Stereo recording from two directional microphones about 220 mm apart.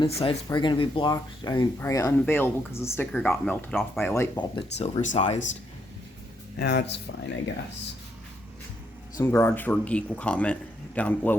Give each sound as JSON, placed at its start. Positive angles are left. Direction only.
{"t": 0.0, "sound": "speech", "side_deg": 20}
{"t": 4.1, "sound": "speech", "side_deg": 15}
{"t": 4.9, "sound": "speech", "side_deg": 35}
{"t": 6.6, "sound": "speech", "side_deg": 50}
{"t": 9.1, "sound": "speech", "side_deg": 15}